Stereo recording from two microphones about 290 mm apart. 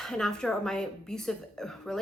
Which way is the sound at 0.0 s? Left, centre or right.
Centre.